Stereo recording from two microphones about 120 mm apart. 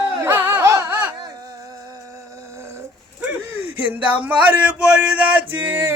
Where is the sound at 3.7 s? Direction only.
15° right (ahead or behind).